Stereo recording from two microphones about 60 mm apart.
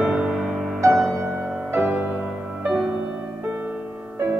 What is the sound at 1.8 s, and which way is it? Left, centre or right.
Music, centre.